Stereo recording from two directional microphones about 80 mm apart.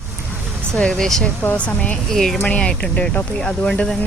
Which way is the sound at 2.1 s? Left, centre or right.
Centre.